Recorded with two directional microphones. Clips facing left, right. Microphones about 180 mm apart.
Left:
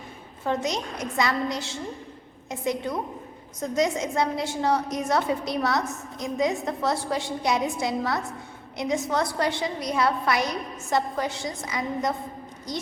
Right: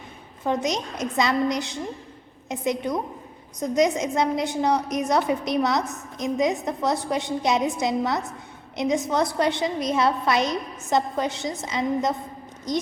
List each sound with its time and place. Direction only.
0.4 s a woman's voice: 20° right (ahead or behind)